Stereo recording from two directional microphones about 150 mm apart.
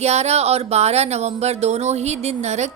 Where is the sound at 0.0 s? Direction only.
45° right (ahead or behind).